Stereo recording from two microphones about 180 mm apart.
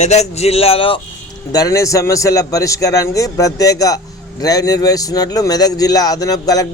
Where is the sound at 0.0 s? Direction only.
40° left (ahead or behind).